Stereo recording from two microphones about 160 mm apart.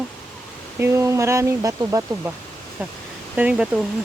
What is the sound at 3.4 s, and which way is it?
Speech, 10° right (ahead or behind).